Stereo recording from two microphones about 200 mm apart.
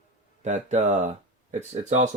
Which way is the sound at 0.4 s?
35° right (ahead or behind).